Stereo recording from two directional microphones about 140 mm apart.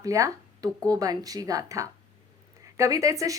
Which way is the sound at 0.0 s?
25° right (ahead or behind).